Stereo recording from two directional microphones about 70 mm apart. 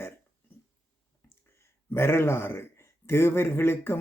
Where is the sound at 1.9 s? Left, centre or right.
Left.